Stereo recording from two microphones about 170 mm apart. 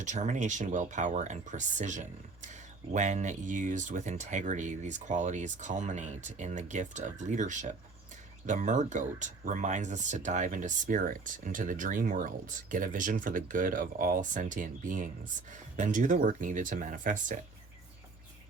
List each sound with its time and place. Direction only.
0.0 s speech: 45° right (ahead or behind)